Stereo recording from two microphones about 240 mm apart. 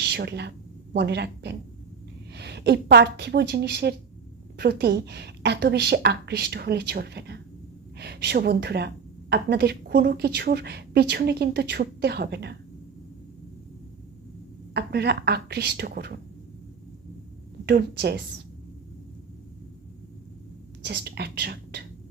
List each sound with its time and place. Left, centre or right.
0.0 s a woman's voice: right
14.7 s a woman's voice: right
17.7 s a woman's voice: right
20.8 s a woman's voice: right